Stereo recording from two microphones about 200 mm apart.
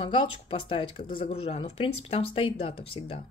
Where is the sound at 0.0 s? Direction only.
25° left (ahead or behind).